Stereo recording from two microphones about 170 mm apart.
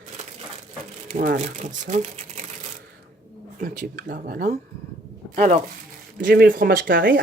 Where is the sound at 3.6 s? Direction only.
55° right (ahead or behind).